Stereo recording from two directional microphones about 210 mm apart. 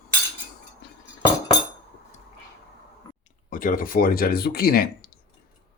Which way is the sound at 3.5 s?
40° left (ahead or behind).